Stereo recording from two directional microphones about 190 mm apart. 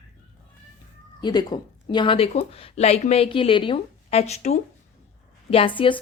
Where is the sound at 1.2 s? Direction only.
25° left (ahead or behind).